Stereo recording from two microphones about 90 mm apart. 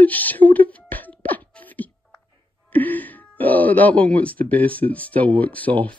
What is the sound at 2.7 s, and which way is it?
Speech, 20° left (ahead or behind).